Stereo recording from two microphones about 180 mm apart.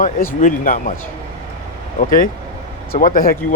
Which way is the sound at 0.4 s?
50° left (ahead or behind).